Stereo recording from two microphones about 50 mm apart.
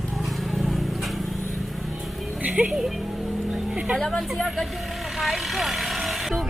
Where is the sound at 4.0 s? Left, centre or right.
Centre.